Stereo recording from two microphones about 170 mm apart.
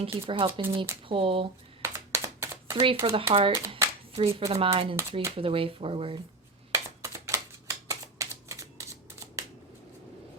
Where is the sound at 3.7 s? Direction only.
35° right (ahead or behind).